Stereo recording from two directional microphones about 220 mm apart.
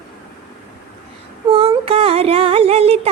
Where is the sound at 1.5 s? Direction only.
25° right (ahead or behind).